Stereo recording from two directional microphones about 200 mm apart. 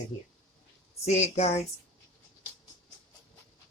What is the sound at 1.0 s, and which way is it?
Speech, 35° left (ahead or behind).